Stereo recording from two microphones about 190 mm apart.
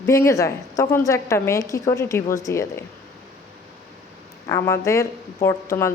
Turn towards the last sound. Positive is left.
turn(degrees=15)  # may be behind; listen again after turning